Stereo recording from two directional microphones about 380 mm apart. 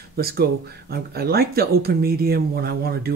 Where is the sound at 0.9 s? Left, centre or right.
Right.